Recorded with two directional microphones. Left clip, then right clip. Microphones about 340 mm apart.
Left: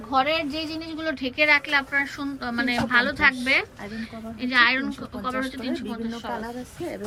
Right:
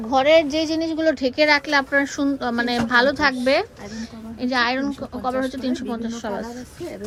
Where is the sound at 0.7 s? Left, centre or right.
Right.